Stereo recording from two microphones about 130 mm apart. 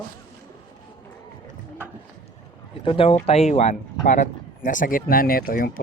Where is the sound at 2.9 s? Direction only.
45° left (ahead or behind); by 5.7 s 90° left.